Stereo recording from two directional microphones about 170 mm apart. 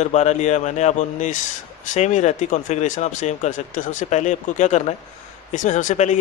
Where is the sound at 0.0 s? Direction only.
40° left (ahead or behind).